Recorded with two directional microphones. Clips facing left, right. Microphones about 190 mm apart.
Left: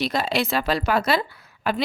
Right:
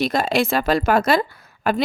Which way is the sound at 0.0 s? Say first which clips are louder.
Right 4 dB; 50° right (ahead or behind).